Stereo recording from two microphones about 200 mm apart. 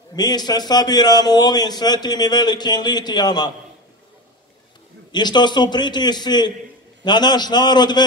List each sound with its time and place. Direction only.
0.1 s a man's voice: 20° left (ahead or behind)
5.1 s a man's voice: 20° left (ahead or behind)